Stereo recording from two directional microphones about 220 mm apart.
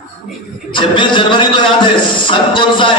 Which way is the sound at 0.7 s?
20° left (ahead or behind).